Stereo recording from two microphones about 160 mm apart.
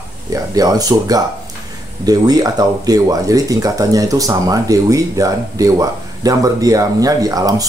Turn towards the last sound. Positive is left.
turn(degrees=-25)  # may be behind; listen again after turning